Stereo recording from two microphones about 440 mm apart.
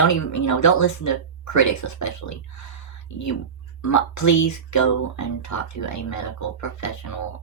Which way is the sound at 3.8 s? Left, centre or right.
Left.